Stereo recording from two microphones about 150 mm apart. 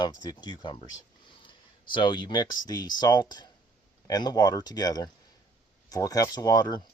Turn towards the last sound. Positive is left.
turn(degrees=25)  # may be behind; listen again after turning